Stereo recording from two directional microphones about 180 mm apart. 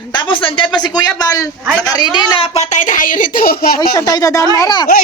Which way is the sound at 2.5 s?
40° left (ahead or behind).